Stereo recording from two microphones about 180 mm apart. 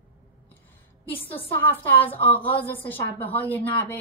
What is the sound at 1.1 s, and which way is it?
Speech, 10° left (ahead or behind).